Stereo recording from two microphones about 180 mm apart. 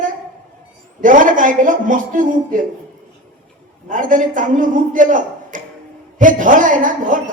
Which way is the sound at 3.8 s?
45° right (ahead or behind).